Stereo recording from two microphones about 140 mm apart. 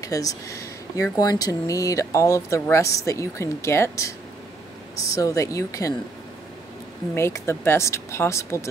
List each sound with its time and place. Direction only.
0.0 s speech: 25° left (ahead or behind)
5.1 s speech: 25° left (ahead or behind)
7.2 s speech: 20° left (ahead or behind)